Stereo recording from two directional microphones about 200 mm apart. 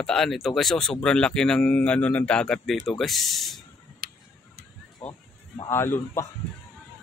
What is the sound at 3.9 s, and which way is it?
Tick-tock, 50° right (ahead or behind).